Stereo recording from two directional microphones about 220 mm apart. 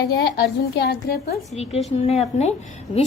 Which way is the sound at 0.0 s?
50° left (ahead or behind).